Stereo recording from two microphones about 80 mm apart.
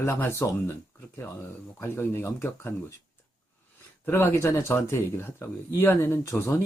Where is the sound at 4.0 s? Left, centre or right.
Left.